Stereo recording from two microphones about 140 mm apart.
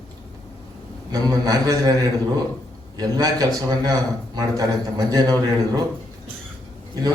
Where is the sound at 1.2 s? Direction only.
25° right (ahead or behind).